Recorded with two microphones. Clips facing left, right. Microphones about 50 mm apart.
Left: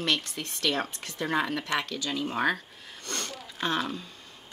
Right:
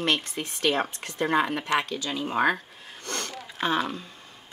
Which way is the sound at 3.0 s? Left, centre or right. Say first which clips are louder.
Right 2 dB; right.